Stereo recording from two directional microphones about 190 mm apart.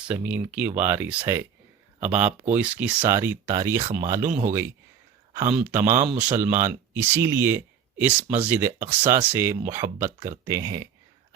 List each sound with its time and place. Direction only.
0.1 s speech: 5° right (ahead or behind)